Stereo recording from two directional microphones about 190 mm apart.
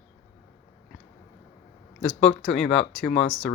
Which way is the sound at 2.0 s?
5° left (ahead or behind).